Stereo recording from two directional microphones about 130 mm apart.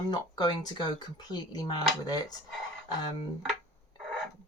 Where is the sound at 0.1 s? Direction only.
30° left (ahead or behind).